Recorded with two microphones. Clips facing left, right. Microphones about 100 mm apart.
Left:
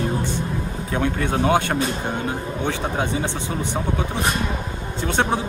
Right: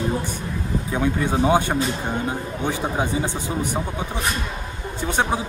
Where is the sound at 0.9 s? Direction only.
10° right (ahead or behind).